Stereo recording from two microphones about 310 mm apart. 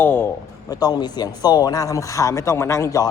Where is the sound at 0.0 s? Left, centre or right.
Centre.